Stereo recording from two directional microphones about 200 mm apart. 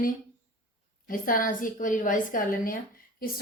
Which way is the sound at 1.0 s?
45° left (ahead or behind).